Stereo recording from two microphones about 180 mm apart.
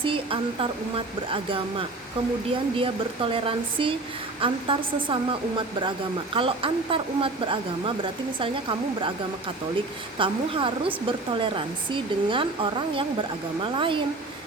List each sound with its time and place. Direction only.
0.0 s speech: 30° right (ahead or behind)
10.2 s speech: 30° right (ahead or behind)